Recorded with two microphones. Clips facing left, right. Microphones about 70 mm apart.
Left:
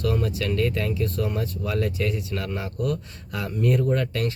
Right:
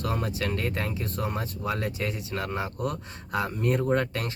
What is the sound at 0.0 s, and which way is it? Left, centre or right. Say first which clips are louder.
Speech: left 4 dB; right.